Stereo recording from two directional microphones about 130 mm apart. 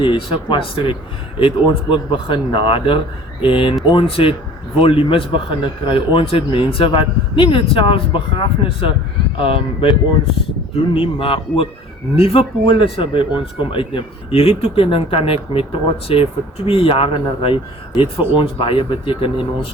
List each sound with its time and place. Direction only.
0.0 s a man's voice: 40° left (ahead or behind)
10.9 s speech: 45° left (ahead or behind)